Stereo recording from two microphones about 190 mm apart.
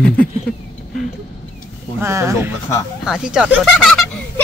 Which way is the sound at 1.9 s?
15° right (ahead or behind).